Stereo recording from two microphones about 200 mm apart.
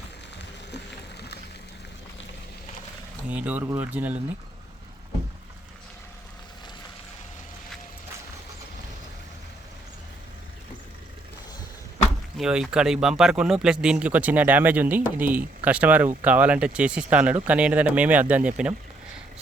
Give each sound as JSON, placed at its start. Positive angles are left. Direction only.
{"t": 0.7, "sound": "a sound", "side_deg": 55}
{"t": 3.2, "sound": "speech", "side_deg": -5}
{"t": 12.4, "sound": "speech", "side_deg": -5}